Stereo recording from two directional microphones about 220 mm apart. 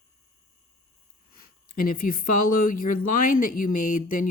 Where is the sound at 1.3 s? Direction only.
40° left (ahead or behind).